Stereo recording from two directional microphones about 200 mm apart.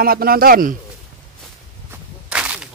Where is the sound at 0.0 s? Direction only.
50° right (ahead or behind).